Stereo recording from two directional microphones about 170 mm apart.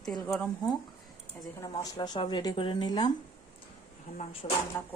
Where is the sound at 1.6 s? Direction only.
25° left (ahead or behind).